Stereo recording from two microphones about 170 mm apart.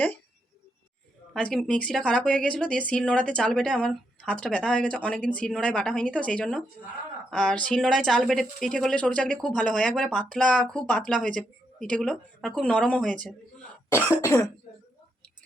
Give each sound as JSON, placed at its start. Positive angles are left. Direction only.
{"t": 1.3, "sound": "speech", "side_deg": 5}
{"t": 13.9, "sound": "cough", "side_deg": 15}